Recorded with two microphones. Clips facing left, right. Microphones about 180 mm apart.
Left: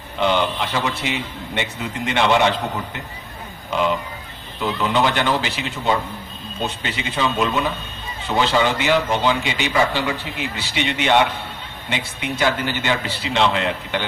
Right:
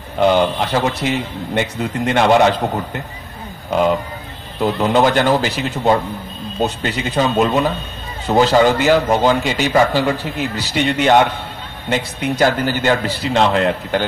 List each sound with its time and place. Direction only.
0.2 s a man's voice: 45° right (ahead or behind)